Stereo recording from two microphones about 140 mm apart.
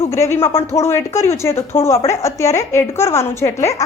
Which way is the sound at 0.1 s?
20° left (ahead or behind).